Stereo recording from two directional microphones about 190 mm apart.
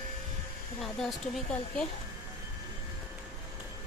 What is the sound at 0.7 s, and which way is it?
Speech, centre (ahead or behind).